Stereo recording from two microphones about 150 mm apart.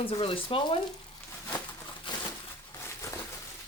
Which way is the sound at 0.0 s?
40° left (ahead or behind).